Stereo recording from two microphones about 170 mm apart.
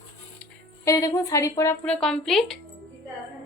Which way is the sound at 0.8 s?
20° left (ahead or behind).